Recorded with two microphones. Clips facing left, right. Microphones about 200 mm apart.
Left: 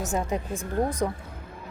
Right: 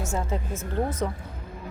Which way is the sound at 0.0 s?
15° left (ahead or behind).